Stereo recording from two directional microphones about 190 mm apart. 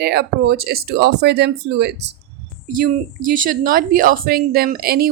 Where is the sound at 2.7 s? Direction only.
45° right (ahead or behind).